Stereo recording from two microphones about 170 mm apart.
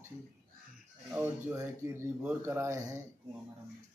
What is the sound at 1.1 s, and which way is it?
Speech, 10° right (ahead or behind).